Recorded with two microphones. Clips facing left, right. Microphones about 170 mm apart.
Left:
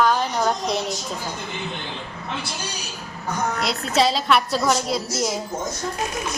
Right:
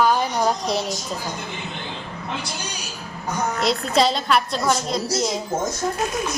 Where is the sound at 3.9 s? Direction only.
5° left (ahead or behind).